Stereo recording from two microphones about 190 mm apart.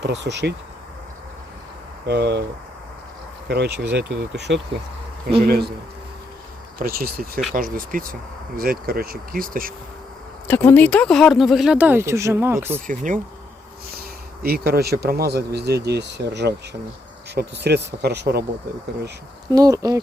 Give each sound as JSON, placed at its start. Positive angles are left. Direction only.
{"t": 0.0, "sound": "speech", "side_deg": -65}
{"t": 2.0, "sound": "speech", "side_deg": -60}
{"t": 3.5, "sound": "speech", "side_deg": -60}
{"t": 6.7, "sound": "speech", "side_deg": -50}
{"t": 10.4, "sound": "speech", "side_deg": 10}
{"t": 14.4, "sound": "speech", "side_deg": -55}
{"t": 19.5, "sound": "speech", "side_deg": -20}